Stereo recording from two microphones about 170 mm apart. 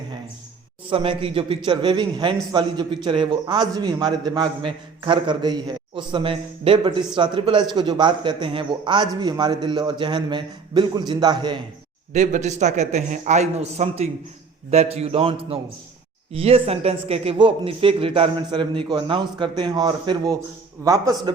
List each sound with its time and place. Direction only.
0.9 s a man's voice: 30° right (ahead or behind)
12.1 s a man's voice: 45° right (ahead or behind); by 21.3 s 20° right (ahead or behind)